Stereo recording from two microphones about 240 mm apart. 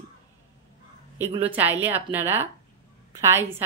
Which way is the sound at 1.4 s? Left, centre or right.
Centre.